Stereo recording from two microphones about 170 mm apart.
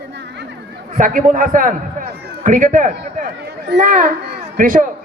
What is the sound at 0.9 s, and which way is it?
A man's voice, 50° right (ahead or behind).